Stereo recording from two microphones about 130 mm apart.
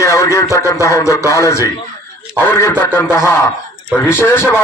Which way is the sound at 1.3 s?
25° left (ahead or behind).